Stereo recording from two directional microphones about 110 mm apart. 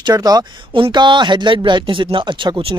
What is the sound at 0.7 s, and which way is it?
Speech, 50° right (ahead or behind).